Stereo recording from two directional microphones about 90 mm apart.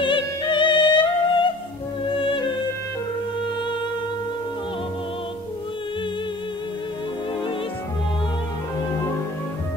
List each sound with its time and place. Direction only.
0.0 s music: 65° left (ahead or behind)
2.1 s music: 75° left (ahead or behind)